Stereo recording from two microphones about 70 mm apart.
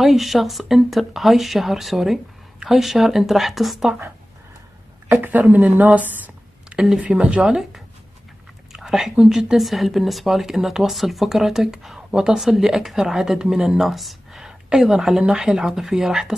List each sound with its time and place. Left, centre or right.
0.0 s speech: centre
5.0 s a sound: right
6.8 s speech: centre
8.7 s speech: centre